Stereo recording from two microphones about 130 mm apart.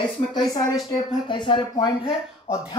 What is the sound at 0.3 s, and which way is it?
Speech, 30° left (ahead or behind).